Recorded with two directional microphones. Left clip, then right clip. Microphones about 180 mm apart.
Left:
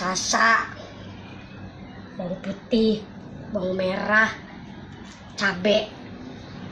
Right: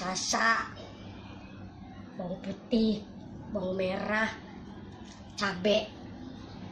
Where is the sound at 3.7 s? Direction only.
5° right (ahead or behind).